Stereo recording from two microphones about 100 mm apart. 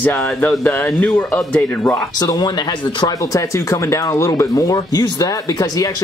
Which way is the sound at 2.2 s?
40° left (ahead or behind).